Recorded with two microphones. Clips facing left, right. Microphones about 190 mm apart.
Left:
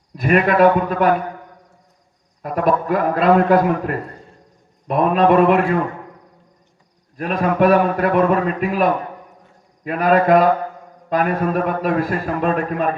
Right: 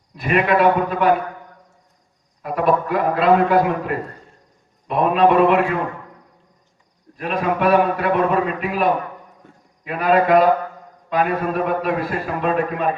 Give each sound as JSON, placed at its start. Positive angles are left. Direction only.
{"t": 0.2, "sound": "a man's voice", "side_deg": 45}
{"t": 2.4, "sound": "a man's voice", "side_deg": 45}
{"t": 4.9, "sound": "a man's voice", "side_deg": 45}
{"t": 7.2, "sound": "a man's voice", "side_deg": 45}